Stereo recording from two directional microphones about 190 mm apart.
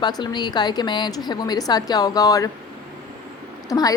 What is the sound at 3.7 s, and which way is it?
Speech, 20° left (ahead or behind).